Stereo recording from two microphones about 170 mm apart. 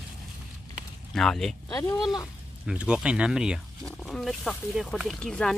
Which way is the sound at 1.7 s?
20° left (ahead or behind).